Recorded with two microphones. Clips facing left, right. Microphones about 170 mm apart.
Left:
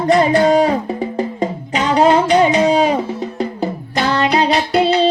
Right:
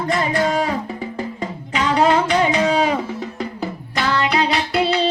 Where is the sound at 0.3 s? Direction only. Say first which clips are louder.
Left 7 dB; 25° left (ahead or behind).